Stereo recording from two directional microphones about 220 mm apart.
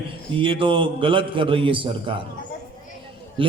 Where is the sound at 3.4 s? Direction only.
25° right (ahead or behind).